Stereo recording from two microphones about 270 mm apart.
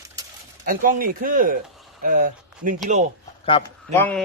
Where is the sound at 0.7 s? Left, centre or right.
Right.